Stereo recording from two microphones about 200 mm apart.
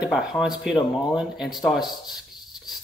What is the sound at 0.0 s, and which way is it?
A man's voice, centre (ahead or behind).